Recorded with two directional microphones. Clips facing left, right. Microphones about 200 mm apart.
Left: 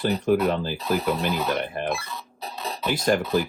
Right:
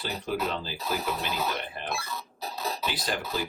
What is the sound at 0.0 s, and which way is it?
Speech, 50° left (ahead or behind).